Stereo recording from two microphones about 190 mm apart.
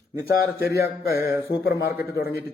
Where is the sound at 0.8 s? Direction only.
55° left (ahead or behind).